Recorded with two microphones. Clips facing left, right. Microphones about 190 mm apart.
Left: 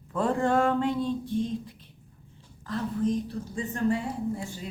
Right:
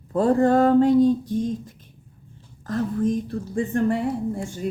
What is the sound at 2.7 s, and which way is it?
A woman's voice, 50° right (ahead or behind).